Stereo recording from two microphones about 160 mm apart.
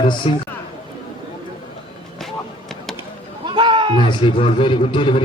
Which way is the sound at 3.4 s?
30° right (ahead or behind).